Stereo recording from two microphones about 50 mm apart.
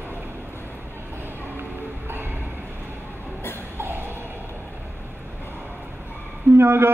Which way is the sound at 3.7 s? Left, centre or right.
Right.